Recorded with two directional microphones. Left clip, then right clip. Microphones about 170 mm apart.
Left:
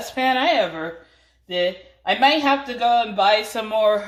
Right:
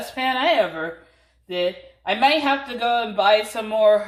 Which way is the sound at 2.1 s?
20° left (ahead or behind).